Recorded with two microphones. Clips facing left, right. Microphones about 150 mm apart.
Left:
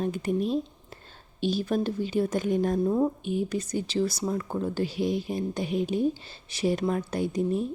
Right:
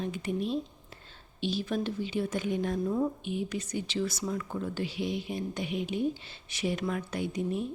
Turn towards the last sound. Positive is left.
turn(degrees=35)  # may be behind; listen again after turning